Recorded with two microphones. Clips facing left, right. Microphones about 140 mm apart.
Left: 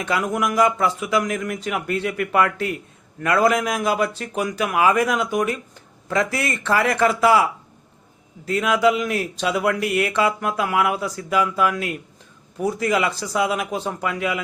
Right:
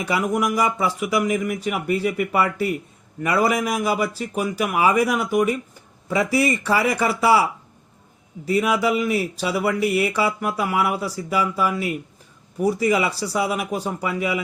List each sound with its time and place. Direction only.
0.0 s speech: 10° right (ahead or behind)
8.4 s speech: 10° right (ahead or behind)